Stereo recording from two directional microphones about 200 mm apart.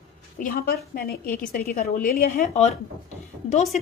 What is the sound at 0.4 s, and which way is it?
A woman's voice, 45° left (ahead or behind).